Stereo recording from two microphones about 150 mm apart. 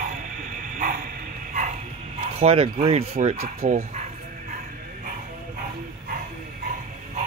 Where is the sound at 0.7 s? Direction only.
65° right (ahead or behind).